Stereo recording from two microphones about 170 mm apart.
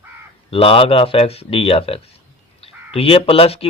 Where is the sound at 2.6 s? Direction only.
35° left (ahead or behind).